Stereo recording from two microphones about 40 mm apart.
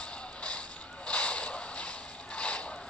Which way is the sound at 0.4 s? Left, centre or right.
Left.